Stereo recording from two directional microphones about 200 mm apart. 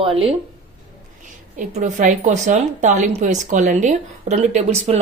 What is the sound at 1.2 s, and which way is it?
A woman's voice, 40° right (ahead or behind).